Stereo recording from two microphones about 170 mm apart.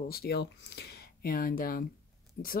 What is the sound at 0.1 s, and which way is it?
Speech, 70° left (ahead or behind).